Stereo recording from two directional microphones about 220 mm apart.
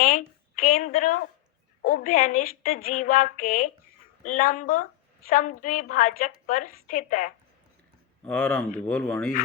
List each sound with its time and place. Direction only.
0.0 s a woman's voice: 40° left (ahead or behind)
8.2 s speech: 5° left (ahead or behind)